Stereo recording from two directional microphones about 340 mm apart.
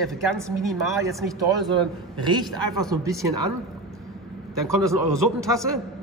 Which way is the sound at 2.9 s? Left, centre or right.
Centre.